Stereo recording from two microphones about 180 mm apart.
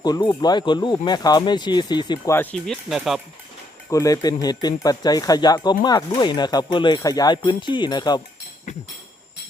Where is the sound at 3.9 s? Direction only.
20° left (ahead or behind).